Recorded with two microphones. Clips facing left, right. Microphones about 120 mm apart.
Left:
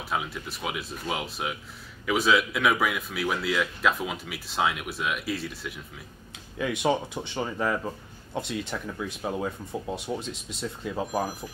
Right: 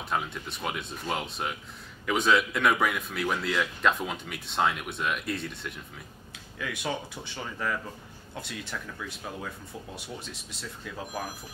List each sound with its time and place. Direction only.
0.1 s a man's voice: centre (ahead or behind)
6.6 s speech: 25° left (ahead or behind)